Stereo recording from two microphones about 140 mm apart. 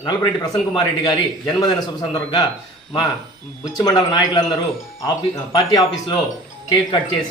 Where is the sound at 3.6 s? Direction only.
30° left (ahead or behind).